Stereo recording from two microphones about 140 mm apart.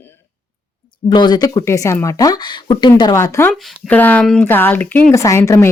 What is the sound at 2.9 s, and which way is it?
A woman's voice, 20° left (ahead or behind).